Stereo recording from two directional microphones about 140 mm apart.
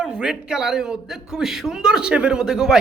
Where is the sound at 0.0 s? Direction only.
5° right (ahead or behind).